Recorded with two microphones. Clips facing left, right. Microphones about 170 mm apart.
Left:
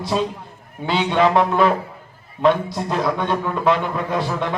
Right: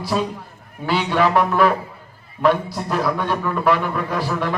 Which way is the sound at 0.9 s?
25° left (ahead or behind).